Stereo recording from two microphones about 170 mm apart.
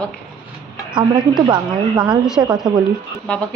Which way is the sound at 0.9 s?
25° right (ahead or behind).